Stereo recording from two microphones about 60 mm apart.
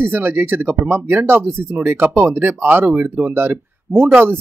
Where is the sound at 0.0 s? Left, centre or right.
Right.